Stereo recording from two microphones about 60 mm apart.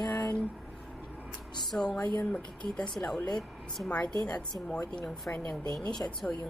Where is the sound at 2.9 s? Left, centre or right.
Centre.